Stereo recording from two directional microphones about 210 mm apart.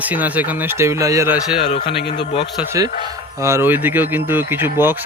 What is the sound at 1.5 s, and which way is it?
Speech, 30° left (ahead or behind).